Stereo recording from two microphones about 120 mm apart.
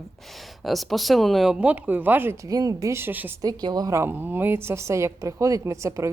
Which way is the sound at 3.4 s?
35° right (ahead or behind).